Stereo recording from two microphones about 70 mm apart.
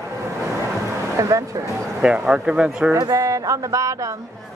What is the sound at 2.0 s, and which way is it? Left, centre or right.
Speech, centre.